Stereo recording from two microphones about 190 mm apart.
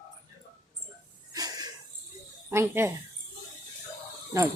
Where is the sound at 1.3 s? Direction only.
20° right (ahead or behind).